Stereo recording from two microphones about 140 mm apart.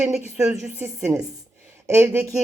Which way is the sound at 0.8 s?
20° right (ahead or behind).